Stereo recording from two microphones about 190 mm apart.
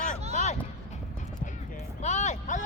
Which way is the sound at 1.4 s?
40° left (ahead or behind).